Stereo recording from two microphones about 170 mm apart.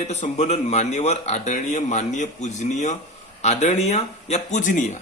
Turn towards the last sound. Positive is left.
turn(degrees=50)  # may be behind; listen again after turning